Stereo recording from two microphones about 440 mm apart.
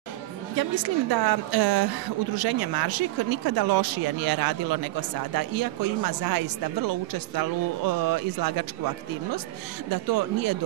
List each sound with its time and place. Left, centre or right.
0.6 s a woman's voice: right